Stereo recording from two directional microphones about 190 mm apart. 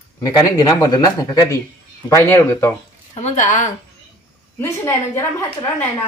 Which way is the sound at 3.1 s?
40° left (ahead or behind).